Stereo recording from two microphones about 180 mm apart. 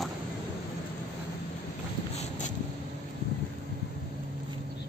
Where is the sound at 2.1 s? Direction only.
40° left (ahead or behind).